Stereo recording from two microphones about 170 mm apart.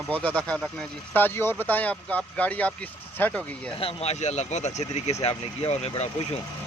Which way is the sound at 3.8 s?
35° left (ahead or behind).